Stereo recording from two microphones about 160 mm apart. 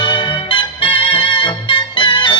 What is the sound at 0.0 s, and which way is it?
Music, 30° left (ahead or behind).